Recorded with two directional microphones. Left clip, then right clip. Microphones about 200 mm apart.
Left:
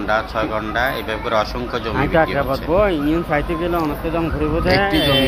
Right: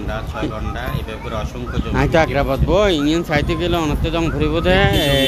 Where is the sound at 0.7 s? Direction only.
15° right (ahead or behind).